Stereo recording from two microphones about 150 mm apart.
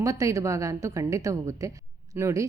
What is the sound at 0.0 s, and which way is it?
A woman's voice, 20° right (ahead or behind).